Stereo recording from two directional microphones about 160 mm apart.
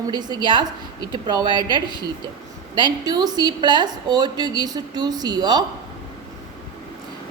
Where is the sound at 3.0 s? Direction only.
25° right (ahead or behind).